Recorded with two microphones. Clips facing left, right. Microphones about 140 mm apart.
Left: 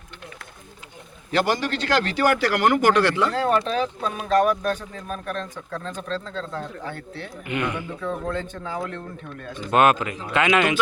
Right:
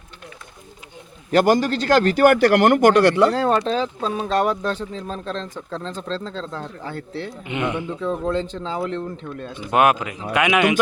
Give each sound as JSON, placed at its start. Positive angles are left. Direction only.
{"t": 1.3, "sound": "a man's voice", "side_deg": -45}
{"t": 7.4, "sound": "speech", "side_deg": -20}
{"t": 9.6, "sound": "speech", "side_deg": -10}